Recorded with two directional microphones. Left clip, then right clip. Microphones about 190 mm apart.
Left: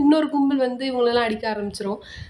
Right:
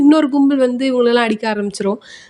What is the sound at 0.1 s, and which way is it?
A woman's voice, 30° right (ahead or behind).